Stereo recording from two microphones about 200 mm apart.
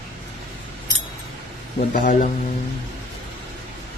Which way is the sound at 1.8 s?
40° left (ahead or behind).